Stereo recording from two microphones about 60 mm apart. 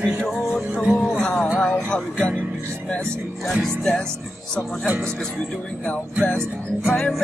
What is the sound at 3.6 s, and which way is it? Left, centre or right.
Music, centre.